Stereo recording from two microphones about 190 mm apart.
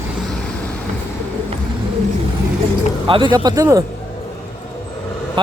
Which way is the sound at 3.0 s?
25° right (ahead or behind).